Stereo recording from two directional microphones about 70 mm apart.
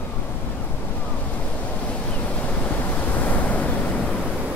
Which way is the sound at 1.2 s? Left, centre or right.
Left.